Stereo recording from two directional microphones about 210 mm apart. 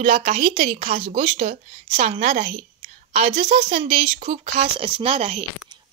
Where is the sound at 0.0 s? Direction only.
30° right (ahead or behind).